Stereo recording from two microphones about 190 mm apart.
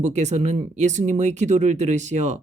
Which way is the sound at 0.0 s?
35° right (ahead or behind).